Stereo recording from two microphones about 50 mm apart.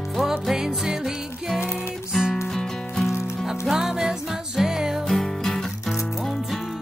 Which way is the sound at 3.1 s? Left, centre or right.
Left.